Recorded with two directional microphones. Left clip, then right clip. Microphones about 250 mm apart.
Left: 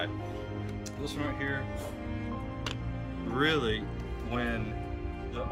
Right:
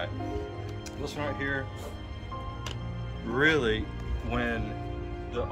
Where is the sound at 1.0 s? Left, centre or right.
Centre.